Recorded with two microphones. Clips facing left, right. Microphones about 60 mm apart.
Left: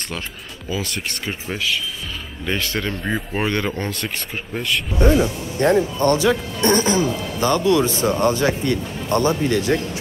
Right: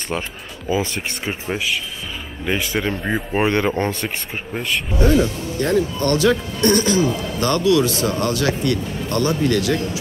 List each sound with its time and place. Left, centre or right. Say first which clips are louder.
0.7 s speech: right 6 dB; right
1.2 s speech: right 2 dB; centre
5.0 s speech: even; centre
7.3 s speech: left 3 dB; centre
7.6 s speech: right 3 dB; left